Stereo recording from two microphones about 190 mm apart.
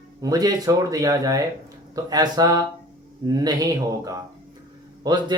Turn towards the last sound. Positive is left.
turn(degrees=-20)  # may be behind; listen again after turning